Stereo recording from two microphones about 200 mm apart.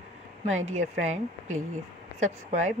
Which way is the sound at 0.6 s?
35° right (ahead or behind).